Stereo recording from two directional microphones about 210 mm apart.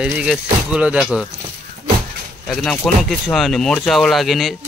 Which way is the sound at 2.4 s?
5° left (ahead or behind).